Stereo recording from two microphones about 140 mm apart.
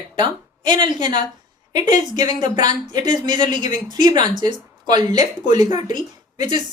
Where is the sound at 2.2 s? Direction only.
30° right (ahead or behind).